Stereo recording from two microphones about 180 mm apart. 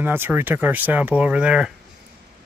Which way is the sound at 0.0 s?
10° right (ahead or behind).